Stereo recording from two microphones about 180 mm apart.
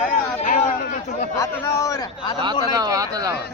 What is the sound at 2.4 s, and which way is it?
Speech, 25° right (ahead or behind).